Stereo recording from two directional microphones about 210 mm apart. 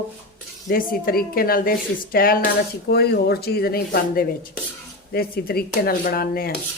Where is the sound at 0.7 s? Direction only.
45° left (ahead or behind).